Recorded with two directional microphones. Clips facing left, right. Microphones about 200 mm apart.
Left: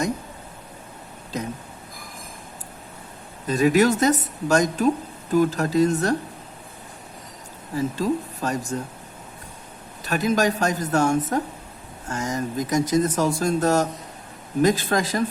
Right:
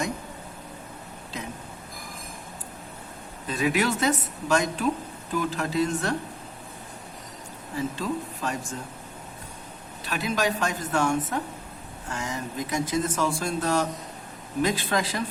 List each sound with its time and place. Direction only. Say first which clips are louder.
1.3 s speech: left 7 dB; 40° left (ahead or behind)
3.4 s speech: left 7 dB; 40° left (ahead or behind)
7.8 s speech: left 5 dB; 40° left (ahead or behind)
10.0 s speech: left 6 dB; 45° left (ahead or behind)